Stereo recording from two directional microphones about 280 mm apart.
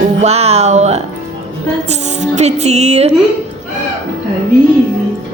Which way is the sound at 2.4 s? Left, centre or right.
Right.